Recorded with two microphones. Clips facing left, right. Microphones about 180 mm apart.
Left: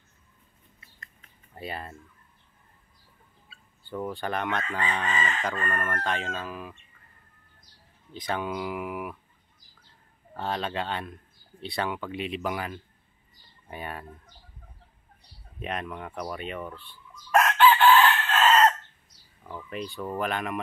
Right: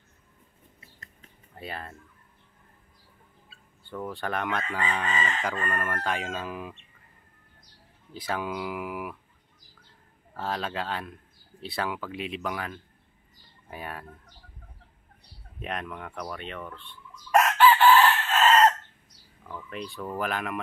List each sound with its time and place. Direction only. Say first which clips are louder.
0.9 s a sound: right 2 dB; 35° right (ahead or behind)
1.5 s speech: left 2 dB; 5° left (ahead or behind)
3.8 s chicken: left 2 dB; 5° left (ahead or behind); by 6.8 s 15° right (ahead or behind)
8.1 s speech: left 1 dB; 5° right (ahead or behind)
10.3 s speech: left 1 dB; centre (ahead or behind)
15.6 s speech: left 1 dB; centre (ahead or behind)
17.4 s chicken: even; 5° right (ahead or behind)
19.4 s speech: left 2 dB; 5° left (ahead or behind)